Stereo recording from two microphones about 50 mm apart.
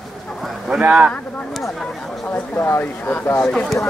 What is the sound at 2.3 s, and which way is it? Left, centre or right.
Speech, left.